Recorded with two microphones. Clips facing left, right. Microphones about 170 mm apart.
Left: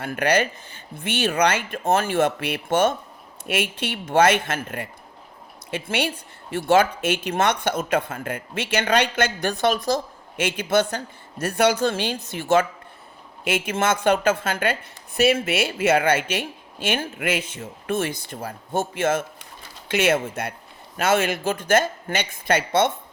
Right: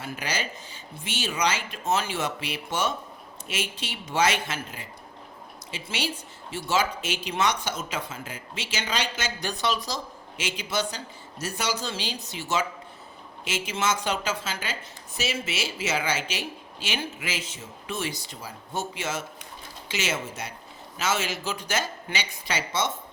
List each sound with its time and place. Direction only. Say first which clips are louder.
0.0 s speech: left 11 dB; 60° left (ahead or behind)